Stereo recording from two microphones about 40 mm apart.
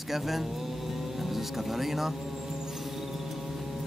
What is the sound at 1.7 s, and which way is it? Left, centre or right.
Vehicle, centre.